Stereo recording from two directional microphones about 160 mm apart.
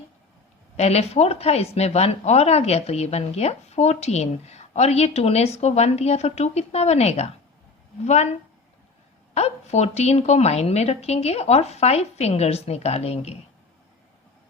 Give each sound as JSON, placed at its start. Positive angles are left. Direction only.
{"t": 0.8, "sound": "speech", "side_deg": 40}
{"t": 9.3, "sound": "speech", "side_deg": 40}